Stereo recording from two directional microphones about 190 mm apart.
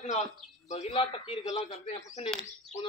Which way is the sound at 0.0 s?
35° left (ahead or behind).